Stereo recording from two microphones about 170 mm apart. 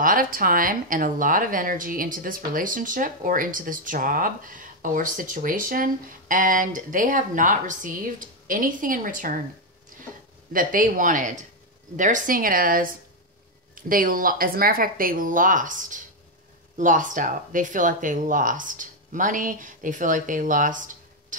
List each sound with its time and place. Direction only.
0.0 s speech: 55° right (ahead or behind)
10.5 s speech: 55° right (ahead or behind)